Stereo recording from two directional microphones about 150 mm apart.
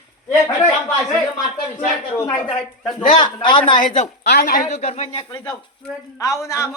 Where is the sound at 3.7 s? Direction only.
50° left (ahead or behind).